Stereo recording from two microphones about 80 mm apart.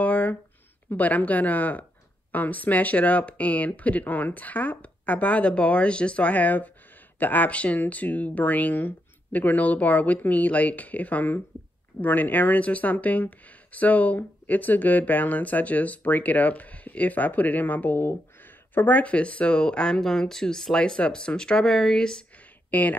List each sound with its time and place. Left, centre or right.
0.0 s a sound: centre
0.8 s speech: centre
22.7 s speech: centre